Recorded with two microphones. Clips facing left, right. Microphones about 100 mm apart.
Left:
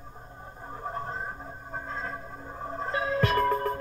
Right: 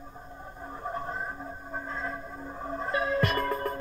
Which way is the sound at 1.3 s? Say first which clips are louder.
Right 1 dB; 10° left (ahead or behind).